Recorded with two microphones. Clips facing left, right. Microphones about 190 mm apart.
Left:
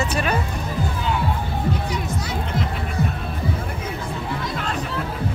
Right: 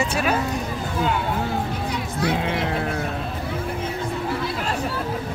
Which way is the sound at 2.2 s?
70° right (ahead or behind).